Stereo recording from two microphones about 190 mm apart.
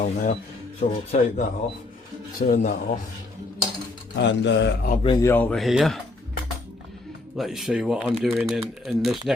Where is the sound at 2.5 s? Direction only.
45° left (ahead or behind).